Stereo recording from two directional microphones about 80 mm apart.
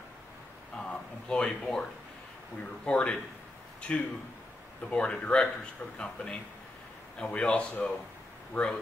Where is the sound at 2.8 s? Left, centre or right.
Centre.